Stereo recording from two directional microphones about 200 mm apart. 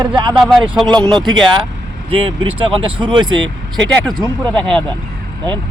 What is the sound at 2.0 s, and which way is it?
Speech, 25° right (ahead or behind).